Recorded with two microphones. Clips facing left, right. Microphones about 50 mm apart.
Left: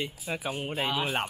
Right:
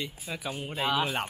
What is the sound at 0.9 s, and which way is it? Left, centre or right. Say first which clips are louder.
Speech: right 3 dB; centre.